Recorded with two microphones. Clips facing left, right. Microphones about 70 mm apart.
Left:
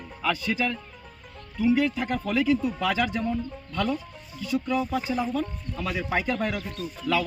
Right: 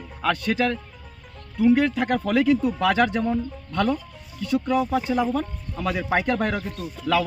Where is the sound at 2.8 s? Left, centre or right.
Right.